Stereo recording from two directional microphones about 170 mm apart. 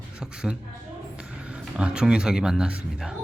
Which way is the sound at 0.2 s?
5° right (ahead or behind).